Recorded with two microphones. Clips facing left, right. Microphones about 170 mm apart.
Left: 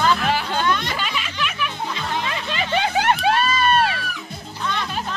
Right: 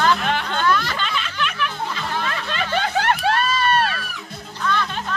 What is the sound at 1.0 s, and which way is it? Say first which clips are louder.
Snicker: right 1 dB; 10° left (ahead or behind).